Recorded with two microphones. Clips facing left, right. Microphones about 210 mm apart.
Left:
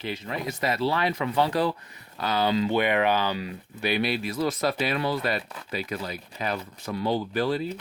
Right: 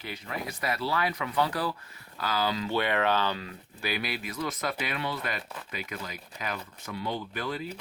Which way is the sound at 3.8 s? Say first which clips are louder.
Left 7 dB; 30° left (ahead or behind).